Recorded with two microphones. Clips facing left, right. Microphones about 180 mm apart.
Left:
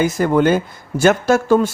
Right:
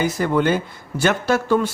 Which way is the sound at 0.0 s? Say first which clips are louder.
Left 4 dB; 45° left (ahead or behind).